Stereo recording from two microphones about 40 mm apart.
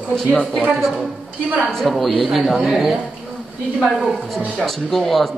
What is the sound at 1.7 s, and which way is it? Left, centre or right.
A man's voice, centre.